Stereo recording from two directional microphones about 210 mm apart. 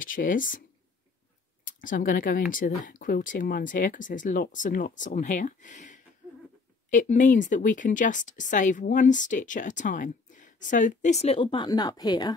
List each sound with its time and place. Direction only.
0.0 s speech: 40° left (ahead or behind)
1.8 s speech: 40° left (ahead or behind); by 12.4 s 20° left (ahead or behind)